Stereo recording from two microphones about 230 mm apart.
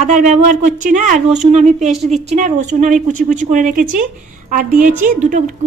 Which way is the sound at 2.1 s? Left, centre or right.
Right.